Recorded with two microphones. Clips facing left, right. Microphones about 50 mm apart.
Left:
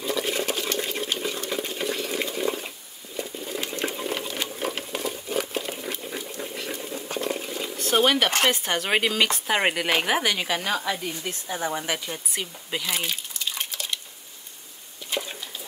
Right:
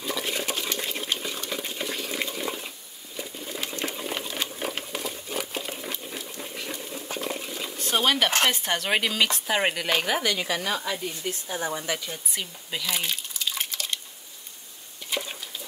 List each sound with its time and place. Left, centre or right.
0.0 s a sound: centre
3.8 s patter: centre
6.5 s a sound: centre
7.9 s speech: centre; by 10.3 s left
10.3 s speech: left
11.6 s speech: left
12.1 s speech: centre
12.9 s drip: centre
15.0 s bird: centre